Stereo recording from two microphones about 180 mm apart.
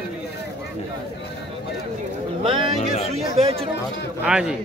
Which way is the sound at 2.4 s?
30° right (ahead or behind).